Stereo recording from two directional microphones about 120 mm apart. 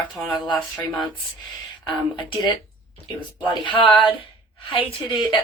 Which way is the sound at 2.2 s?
40° left (ahead or behind).